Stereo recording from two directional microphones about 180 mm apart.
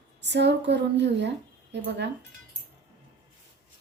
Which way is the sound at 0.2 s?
70° right (ahead or behind).